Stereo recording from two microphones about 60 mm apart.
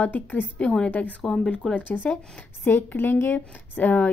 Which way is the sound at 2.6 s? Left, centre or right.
Left.